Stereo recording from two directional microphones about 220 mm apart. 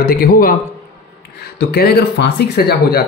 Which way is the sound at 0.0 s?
40° left (ahead or behind).